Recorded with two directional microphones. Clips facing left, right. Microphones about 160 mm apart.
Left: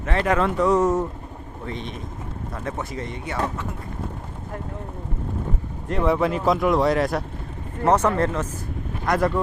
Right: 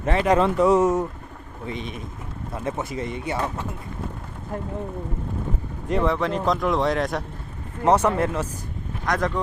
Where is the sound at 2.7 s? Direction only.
25° right (ahead or behind).